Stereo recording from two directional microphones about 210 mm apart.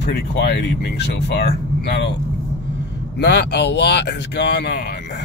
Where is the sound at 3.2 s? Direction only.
55° left (ahead or behind).